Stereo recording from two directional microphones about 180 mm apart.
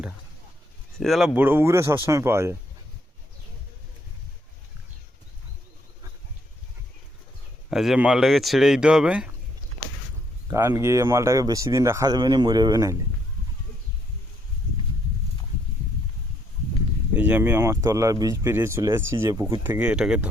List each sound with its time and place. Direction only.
0.9 s speech: centre (ahead or behind)
7.7 s speech: 5° right (ahead or behind)
10.5 s speech: 15° right (ahead or behind)
17.2 s speech: 10° right (ahead or behind)